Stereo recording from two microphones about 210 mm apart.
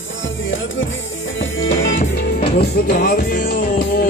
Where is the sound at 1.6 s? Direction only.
65° left (ahead or behind).